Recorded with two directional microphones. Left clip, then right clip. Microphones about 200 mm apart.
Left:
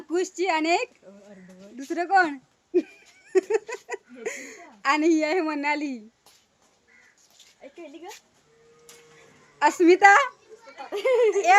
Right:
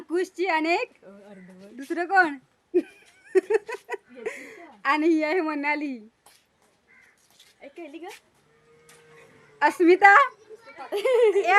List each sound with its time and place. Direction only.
0.1 s speech: 5° right (ahead or behind)
9.6 s a woman's voice: centre (ahead or behind)
10.9 s a child's voice: 45° right (ahead or behind)